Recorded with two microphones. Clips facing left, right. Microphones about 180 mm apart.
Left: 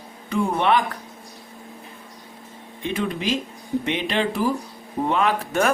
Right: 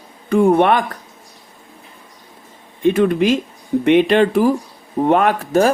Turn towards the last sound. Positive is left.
turn(degrees=-50)  # may be behind; listen again after turning